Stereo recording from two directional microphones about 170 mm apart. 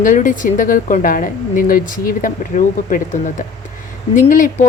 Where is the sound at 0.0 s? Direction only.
50° left (ahead or behind).